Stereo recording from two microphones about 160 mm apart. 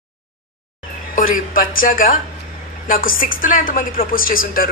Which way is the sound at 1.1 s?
60° left (ahead or behind).